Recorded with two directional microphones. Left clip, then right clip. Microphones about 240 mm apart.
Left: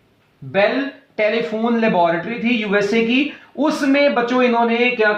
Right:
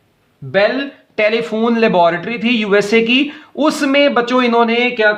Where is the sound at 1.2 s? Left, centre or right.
Right.